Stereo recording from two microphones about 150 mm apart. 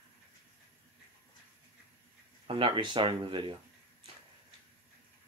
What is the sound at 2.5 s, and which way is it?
Speech, 35° right (ahead or behind).